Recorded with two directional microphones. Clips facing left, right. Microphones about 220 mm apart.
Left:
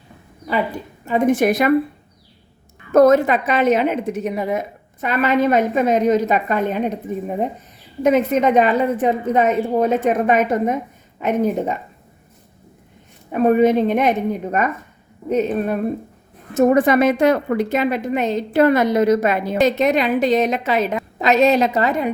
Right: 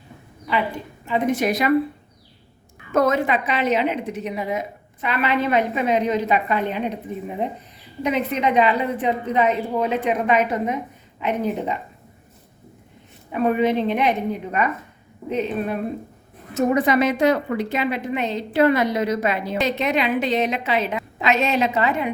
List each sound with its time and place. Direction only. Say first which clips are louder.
1.0 s a woman's voice: left 5 dB; 45° left (ahead or behind)
2.9 s a woman's voice: left 7 dB; 40° left (ahead or behind)
13.3 s a woman's voice: left 5 dB; 45° left (ahead or behind)